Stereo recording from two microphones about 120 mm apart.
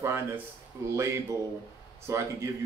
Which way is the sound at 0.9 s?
25° right (ahead or behind).